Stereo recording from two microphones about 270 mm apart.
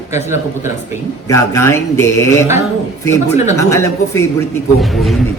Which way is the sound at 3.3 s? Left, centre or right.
Left.